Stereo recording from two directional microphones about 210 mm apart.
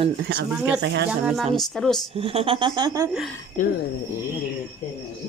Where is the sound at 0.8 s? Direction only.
55° right (ahead or behind).